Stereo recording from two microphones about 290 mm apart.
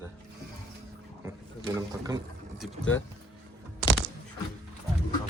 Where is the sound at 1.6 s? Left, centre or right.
Centre.